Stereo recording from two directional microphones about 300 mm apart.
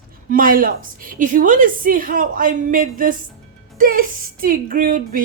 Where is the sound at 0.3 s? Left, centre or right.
Right.